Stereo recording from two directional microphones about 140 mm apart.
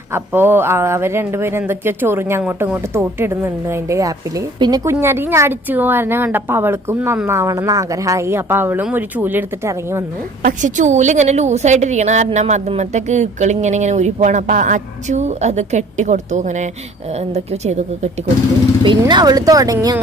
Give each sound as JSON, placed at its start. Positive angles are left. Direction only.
{"t": 0.1, "sound": "a woman's voice", "side_deg": -15}
{"t": 10.4, "sound": "a woman's voice", "side_deg": -65}
{"t": 18.8, "sound": "speech", "side_deg": -30}